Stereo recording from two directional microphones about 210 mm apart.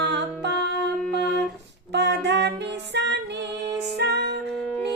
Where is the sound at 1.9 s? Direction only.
55° right (ahead or behind).